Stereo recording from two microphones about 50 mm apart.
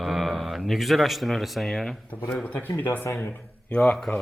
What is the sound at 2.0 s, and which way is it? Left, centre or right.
A man's voice, left.